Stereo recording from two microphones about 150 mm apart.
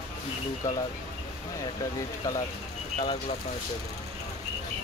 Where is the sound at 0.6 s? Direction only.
20° left (ahead or behind).